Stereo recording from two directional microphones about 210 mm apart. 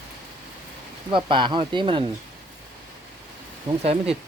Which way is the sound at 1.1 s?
20° right (ahead or behind).